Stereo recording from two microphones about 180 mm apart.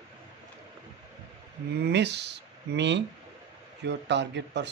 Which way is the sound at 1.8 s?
70° right (ahead or behind).